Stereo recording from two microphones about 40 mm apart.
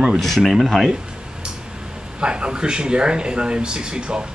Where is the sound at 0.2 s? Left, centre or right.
Centre.